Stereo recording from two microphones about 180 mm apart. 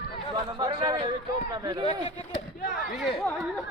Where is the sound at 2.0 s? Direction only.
35° left (ahead or behind).